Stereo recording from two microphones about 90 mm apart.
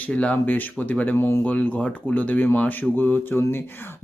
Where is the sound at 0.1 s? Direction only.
15° left (ahead or behind).